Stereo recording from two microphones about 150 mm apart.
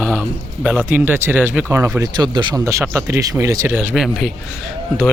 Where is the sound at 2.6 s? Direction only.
20° right (ahead or behind).